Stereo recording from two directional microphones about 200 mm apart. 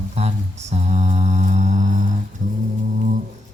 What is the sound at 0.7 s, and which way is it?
Mantra, 35° right (ahead or behind).